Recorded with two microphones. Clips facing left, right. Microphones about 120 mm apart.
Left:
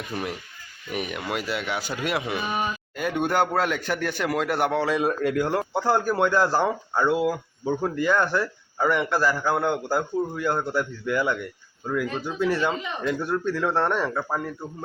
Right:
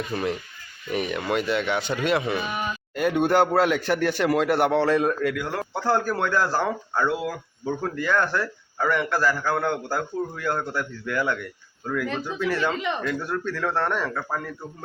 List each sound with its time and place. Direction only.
0.1 s a man's voice: 10° left (ahead or behind)
5.3 s speech: 35° left (ahead or behind)
5.5 s speech: 15° left (ahead or behind)